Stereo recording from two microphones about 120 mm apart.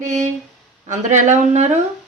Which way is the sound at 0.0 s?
85° right.